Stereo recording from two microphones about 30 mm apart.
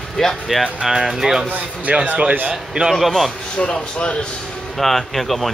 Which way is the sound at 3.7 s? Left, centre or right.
Left.